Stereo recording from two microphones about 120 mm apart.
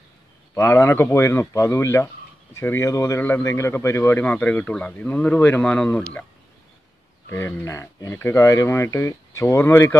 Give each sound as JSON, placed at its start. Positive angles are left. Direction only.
{"t": 0.6, "sound": "speech", "side_deg": 20}
{"t": 7.2, "sound": "speech", "side_deg": 20}